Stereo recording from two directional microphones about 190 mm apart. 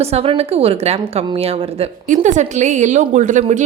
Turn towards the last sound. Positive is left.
turn(degrees=-40)  # may be behind; listen again after turning